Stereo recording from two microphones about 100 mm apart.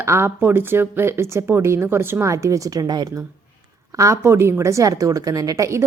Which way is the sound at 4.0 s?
30° right (ahead or behind).